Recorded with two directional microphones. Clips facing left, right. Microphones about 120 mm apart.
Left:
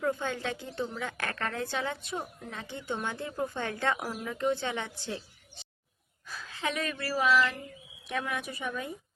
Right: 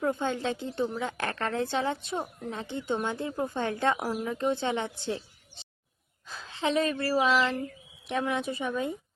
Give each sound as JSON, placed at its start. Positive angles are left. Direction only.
{"t": 0.0, "sound": "a woman's voice", "side_deg": -25}